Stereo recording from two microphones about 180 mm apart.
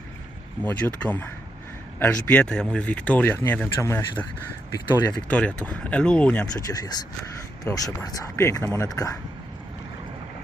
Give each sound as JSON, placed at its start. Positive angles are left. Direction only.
{"t": 0.6, "sound": "speech", "side_deg": 10}
{"t": 5.3, "sound": "speech", "side_deg": 10}
{"t": 6.5, "sound": "speech", "side_deg": 20}